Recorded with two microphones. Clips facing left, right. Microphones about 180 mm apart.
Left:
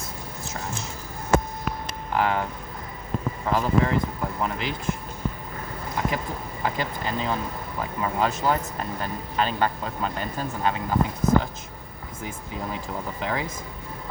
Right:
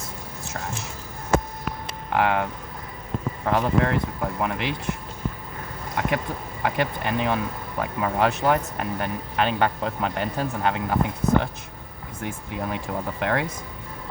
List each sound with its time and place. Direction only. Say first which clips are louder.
2.1 s speech: right 2 dB; 70° right (ahead or behind)
3.4 s speech: right 1 dB; 65° right (ahead or behind)
6.0 s speech: right 2 dB; 65° right (ahead or behind)
12.7 s speech: right 3 dB; 65° right (ahead or behind)